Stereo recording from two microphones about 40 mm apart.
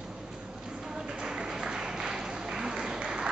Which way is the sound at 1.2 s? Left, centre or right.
Centre.